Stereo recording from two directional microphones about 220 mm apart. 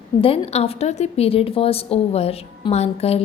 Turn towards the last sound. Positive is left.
turn(degrees=30)  # may be behind; listen again after turning